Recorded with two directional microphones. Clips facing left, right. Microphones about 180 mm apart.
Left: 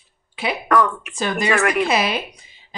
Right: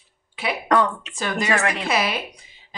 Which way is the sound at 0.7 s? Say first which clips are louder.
Left 1 dB; 25° right (ahead or behind).